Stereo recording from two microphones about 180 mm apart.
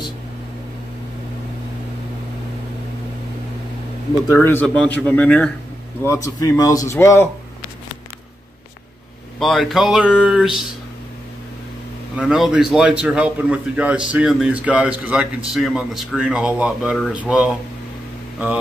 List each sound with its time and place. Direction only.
4.3 s a man's voice: 10° left (ahead or behind)
9.4 s a man's voice: centre (ahead or behind)
12.2 s a man's voice: 5° right (ahead or behind)